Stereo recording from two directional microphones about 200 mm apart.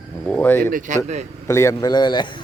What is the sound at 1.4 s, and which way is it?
Speech, 15° left (ahead or behind).